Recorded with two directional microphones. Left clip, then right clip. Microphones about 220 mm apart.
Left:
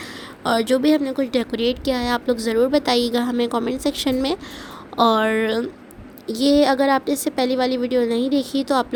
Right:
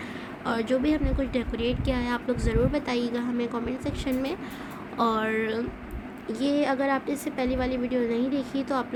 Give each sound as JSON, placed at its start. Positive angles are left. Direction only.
{"t": 0.4, "sound": "a woman's voice", "side_deg": 35}